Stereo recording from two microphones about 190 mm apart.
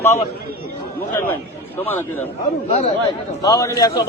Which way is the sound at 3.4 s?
20° left (ahead or behind).